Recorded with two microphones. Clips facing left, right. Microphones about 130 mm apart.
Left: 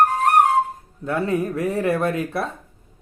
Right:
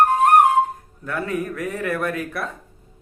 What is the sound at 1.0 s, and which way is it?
Speech, 25° left (ahead or behind).